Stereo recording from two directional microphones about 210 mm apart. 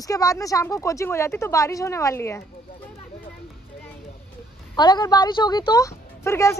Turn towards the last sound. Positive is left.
turn(degrees=15)  # may be behind; listen again after turning